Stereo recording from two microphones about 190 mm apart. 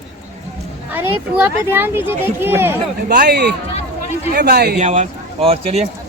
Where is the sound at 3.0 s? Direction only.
55° right (ahead or behind).